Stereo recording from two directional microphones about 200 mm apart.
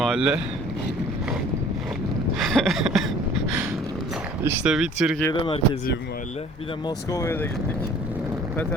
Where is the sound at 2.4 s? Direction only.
Centre (ahead or behind).